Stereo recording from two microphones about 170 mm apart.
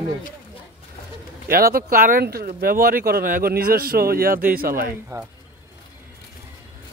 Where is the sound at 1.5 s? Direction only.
60° right (ahead or behind).